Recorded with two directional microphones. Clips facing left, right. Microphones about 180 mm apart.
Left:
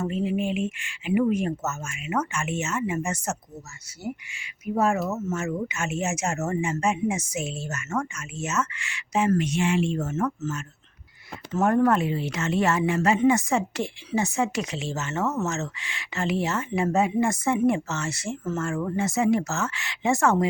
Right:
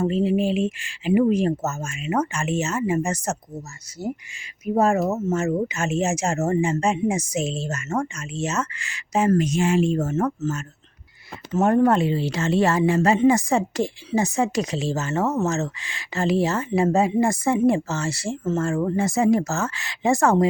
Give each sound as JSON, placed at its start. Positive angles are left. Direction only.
{"t": 0.0, "sound": "speech", "side_deg": -30}
{"t": 11.5, "sound": "speech", "side_deg": -20}